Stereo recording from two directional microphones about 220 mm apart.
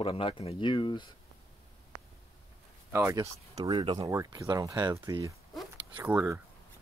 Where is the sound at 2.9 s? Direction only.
10° right (ahead or behind).